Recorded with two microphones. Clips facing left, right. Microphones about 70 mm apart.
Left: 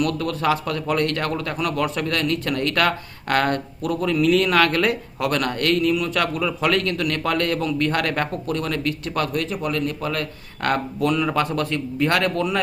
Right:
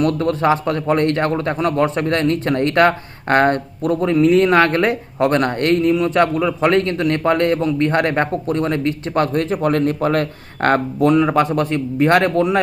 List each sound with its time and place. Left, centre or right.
0.0 s a man's voice: right